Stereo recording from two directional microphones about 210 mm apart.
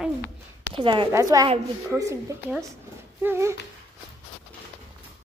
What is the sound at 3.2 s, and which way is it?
Speech, 10° right (ahead or behind).